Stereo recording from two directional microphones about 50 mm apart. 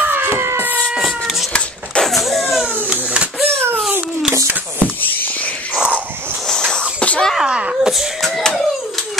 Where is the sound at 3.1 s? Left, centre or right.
Centre.